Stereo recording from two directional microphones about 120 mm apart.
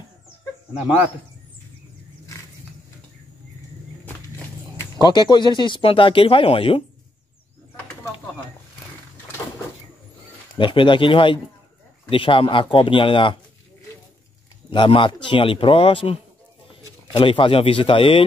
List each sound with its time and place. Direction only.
4.9 s speech: 40° left (ahead or behind)
10.6 s speech: 45° left (ahead or behind)
14.7 s speech: 45° left (ahead or behind)